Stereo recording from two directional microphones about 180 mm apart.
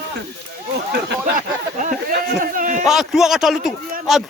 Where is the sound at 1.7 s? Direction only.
45° right (ahead or behind).